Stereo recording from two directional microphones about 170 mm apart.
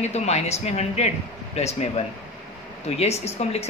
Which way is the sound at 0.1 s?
40° left (ahead or behind).